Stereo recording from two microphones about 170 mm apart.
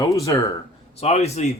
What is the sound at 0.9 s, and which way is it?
Speech, 40° left (ahead or behind).